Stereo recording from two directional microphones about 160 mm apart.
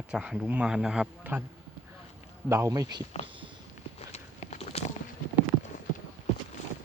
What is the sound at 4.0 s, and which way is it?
Walk, 45° left (ahead or behind).